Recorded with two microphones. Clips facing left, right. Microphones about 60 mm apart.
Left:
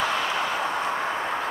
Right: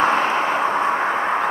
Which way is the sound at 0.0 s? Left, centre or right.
Right.